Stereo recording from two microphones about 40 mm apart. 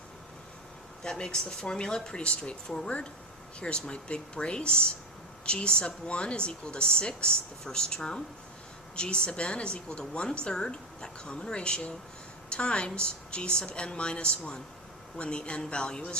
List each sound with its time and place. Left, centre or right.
1.0 s a woman's voice: centre